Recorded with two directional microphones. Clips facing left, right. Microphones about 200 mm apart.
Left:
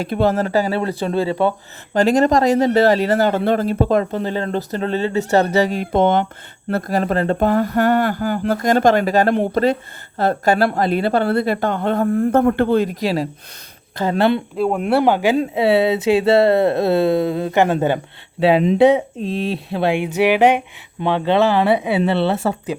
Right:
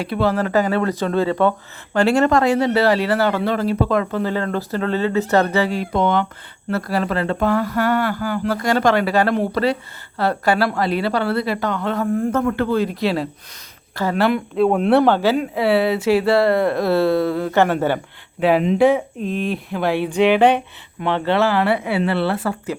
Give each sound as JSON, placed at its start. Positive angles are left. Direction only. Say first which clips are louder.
{"t": 0.0, "sound": "speech", "louder": "left 2 dB", "side_deg": 45}
{"t": 0.9, "sound": "speech", "louder": "even", "side_deg": 10}
{"t": 1.9, "sound": "speech", "louder": "left 1 dB", "side_deg": 40}
{"t": 4.1, "sound": "speech", "louder": "even", "side_deg": 20}
{"t": 5.5, "sound": "speech", "louder": "left 2 dB", "side_deg": 40}
{"t": 12.7, "sound": "speech", "louder": "left 2 dB", "side_deg": 45}
{"t": 13.9, "sound": "speech", "louder": "left 2 dB", "side_deg": 20}
{"t": 14.5, "sound": "speech", "louder": "right 2 dB", "side_deg": 5}
{"t": 15.0, "sound": "speech", "louder": "left 1 dB", "side_deg": 15}
{"t": 18.8, "sound": "speech", "louder": "left 2 dB", "side_deg": 20}